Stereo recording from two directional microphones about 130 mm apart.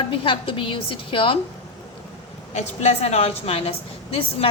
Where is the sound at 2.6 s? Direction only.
55° left (ahead or behind).